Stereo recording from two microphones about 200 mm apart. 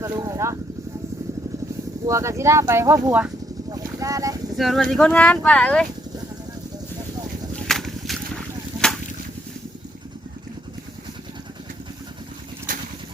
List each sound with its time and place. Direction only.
0.0 s speech: 15° right (ahead or behind)
2.0 s speech: 15° right (ahead or behind)
3.7 s vehicle: 15° right (ahead or behind)
4.5 s speech: centre (ahead or behind)
7.5 s a sound: centre (ahead or behind)
12.7 s a sound: 40° right (ahead or behind)